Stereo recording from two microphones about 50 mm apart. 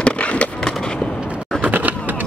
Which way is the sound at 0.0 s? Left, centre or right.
Left.